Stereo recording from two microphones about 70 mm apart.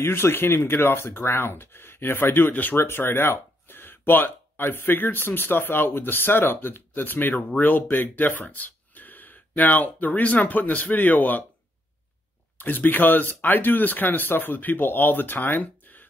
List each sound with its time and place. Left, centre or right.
0.0 s speech: left
12.5 s speech: left